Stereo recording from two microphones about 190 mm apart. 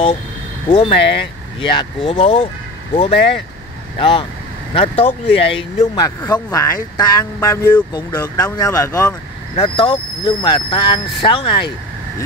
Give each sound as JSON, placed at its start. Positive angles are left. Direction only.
{"t": 0.7, "sound": "speech", "side_deg": 25}